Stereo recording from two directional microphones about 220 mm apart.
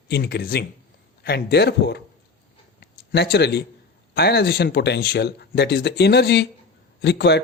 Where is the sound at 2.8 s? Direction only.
50° left (ahead or behind).